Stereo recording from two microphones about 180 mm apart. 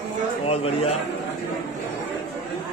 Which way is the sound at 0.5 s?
35° left (ahead or behind).